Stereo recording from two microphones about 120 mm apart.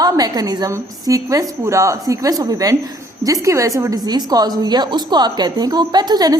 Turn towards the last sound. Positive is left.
turn(degrees=-35)  # may be behind; listen again after turning